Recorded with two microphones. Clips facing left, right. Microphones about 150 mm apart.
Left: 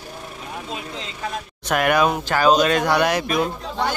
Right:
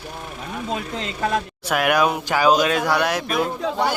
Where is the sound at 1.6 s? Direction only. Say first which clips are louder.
Left 2 dB; 5° right (ahead or behind).